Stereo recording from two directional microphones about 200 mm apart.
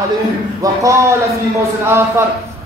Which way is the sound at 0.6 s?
15° right (ahead or behind).